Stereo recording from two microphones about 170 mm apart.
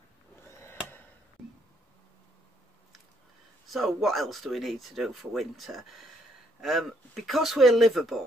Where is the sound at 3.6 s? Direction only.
Centre (ahead or behind).